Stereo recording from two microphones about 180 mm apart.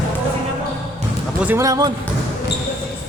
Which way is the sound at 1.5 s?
15° right (ahead or behind).